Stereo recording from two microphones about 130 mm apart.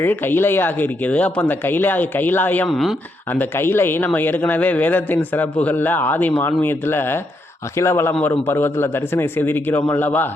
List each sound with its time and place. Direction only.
0.0 s speech: 15° left (ahead or behind)
2.6 s speech: centre (ahead or behind)
3.2 s speech: 15° left (ahead or behind)